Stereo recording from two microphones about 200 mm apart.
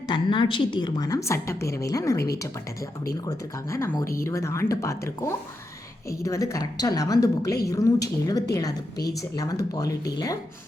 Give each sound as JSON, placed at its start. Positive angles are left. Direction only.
{"t": 0.1, "sound": "a woman's voice", "side_deg": 25}
{"t": 3.2, "sound": "a woman's voice", "side_deg": 15}